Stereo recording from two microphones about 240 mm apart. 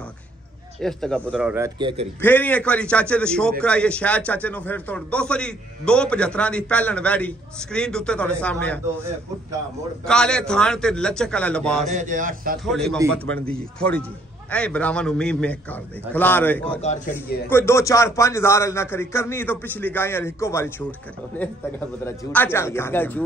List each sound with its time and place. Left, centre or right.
0.7 s a man's voice: centre
1.8 s a man's voice: right
2.2 s a man's voice: centre
10.0 s a man's voice: centre
11.9 s a man's voice: right
12.6 s a man's voice: centre
16.8 s a man's voice: left
17.5 s speech: centre